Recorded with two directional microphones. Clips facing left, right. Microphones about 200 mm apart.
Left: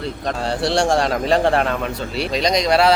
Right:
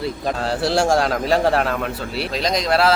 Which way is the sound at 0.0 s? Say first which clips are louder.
Right 1 dB; 5° right (ahead or behind).